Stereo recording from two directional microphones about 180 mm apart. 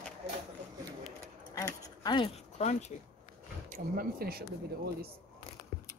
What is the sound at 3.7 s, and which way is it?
Speech, 55° right (ahead or behind).